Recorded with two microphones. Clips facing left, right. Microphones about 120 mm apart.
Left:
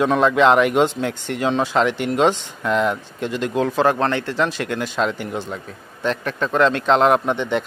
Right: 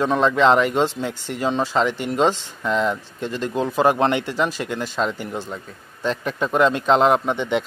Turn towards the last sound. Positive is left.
turn(degrees=0)  # may be behind; listen again after turning